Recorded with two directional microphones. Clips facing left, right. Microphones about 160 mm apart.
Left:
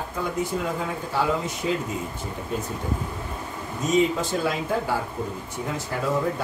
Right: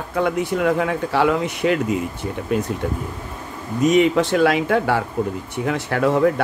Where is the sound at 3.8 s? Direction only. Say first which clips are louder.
Right 6 dB; 75° right (ahead or behind).